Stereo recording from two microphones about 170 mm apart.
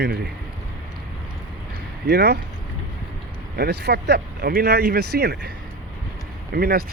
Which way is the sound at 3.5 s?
70° right (ahead or behind).